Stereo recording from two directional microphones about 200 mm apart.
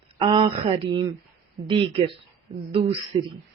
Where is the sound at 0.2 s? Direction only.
25° right (ahead or behind).